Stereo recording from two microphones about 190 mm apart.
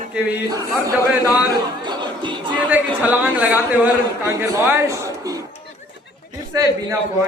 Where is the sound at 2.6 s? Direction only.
10° right (ahead or behind).